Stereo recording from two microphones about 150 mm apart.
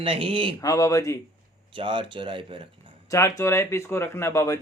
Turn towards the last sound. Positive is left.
turn(degrees=20)  # may be behind; listen again after turning